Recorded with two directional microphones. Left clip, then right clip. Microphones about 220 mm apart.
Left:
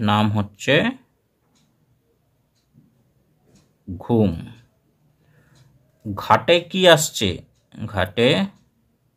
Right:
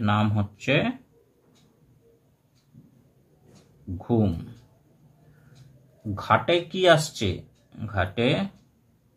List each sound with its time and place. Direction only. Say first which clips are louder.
0.0 s speech: left 5 dB; 40° left (ahead or behind)
4.0 s speech: left 6 dB; 40° left (ahead or behind)
6.2 s speech: left 6 dB; 40° left (ahead or behind)